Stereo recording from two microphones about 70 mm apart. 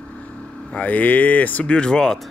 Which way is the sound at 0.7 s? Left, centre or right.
Left.